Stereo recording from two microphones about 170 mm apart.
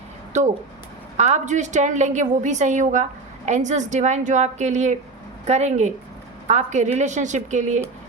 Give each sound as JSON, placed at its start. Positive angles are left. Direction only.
{"t": 1.1, "sound": "a woman's voice", "side_deg": -40}